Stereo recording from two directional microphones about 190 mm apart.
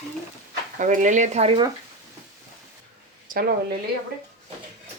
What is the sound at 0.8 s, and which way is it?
Speech, 40° right (ahead or behind).